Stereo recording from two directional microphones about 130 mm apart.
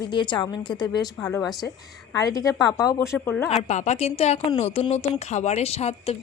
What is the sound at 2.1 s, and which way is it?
Speech, 30° left (ahead or behind).